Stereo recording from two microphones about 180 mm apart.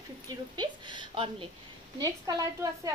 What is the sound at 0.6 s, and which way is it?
Speech, 25° right (ahead or behind).